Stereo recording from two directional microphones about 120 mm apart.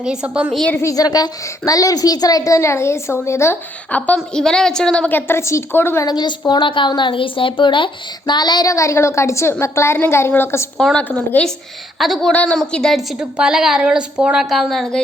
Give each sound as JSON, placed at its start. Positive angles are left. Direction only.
{"t": 0.0, "sound": "a woman's voice", "side_deg": -5}
{"t": 0.8, "sound": "a woman's voice", "side_deg": 30}
{"t": 6.1, "sound": "a woman's voice", "side_deg": 35}
{"t": 10.8, "sound": "a woman's voice", "side_deg": 5}